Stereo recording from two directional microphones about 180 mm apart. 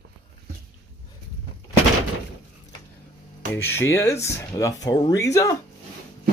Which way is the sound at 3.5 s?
15° left (ahead or behind).